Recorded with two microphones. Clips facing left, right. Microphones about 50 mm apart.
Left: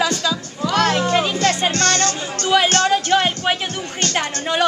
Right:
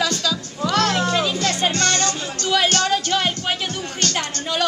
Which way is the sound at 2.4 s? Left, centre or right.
Centre.